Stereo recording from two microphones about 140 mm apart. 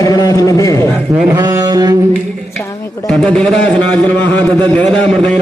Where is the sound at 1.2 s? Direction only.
25° right (ahead or behind).